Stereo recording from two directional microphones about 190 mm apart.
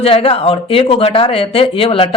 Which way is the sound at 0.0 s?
30° left (ahead or behind).